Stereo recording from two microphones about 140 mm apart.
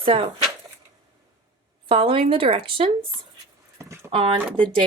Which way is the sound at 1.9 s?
40° right (ahead or behind).